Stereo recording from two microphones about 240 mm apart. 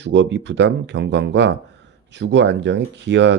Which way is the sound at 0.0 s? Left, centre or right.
Right.